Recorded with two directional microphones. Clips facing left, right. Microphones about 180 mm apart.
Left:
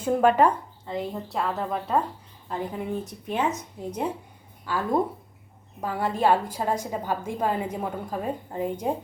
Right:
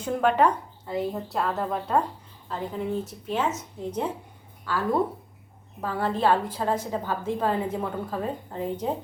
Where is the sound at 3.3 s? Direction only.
15° left (ahead or behind).